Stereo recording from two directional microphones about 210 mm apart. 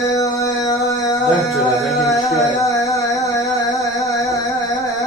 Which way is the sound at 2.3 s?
15° left (ahead or behind).